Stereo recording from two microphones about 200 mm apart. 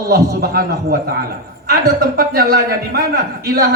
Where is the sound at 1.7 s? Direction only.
50° right (ahead or behind).